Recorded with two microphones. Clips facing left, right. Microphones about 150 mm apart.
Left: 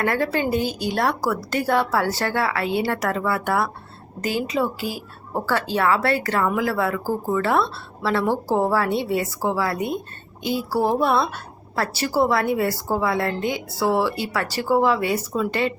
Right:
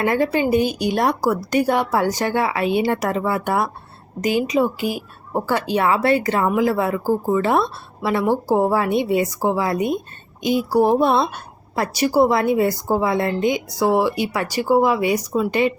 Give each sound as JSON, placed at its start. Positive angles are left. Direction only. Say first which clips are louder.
{"t": 0.0, "sound": "speech", "louder": "right 3 dB", "side_deg": -15}